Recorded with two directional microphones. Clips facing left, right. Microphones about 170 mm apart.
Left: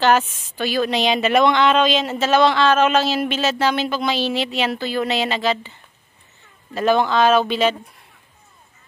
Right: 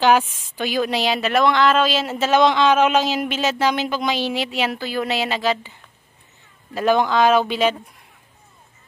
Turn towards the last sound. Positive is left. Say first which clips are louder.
# left 1 dB
turn(degrees=-10)  # may be behind; listen again after turning